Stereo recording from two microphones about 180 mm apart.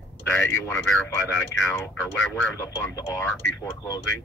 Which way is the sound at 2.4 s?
10° left (ahead or behind).